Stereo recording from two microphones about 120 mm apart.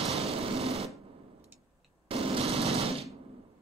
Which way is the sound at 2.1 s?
50° right (ahead or behind).